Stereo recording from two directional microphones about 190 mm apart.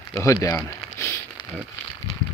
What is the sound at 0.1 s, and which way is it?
Speech, 15° left (ahead or behind).